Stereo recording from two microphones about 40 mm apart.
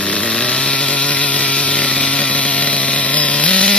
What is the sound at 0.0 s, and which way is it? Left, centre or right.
Chainsaw, left.